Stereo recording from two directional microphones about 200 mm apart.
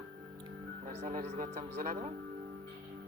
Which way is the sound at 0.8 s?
35° right (ahead or behind).